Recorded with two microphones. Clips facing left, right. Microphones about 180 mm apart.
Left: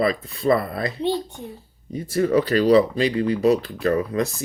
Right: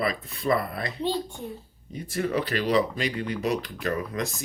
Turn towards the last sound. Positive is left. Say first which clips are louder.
# left 8 dB
turn(degrees=35)  # may be behind; listen again after turning